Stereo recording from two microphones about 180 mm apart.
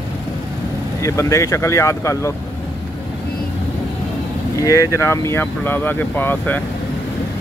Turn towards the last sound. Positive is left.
turn(degrees=10)  # may be behind; listen again after turning